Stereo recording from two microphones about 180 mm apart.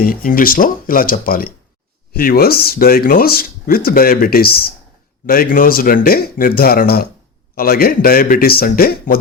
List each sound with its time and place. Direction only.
0.0 s speech: 55° left (ahead or behind)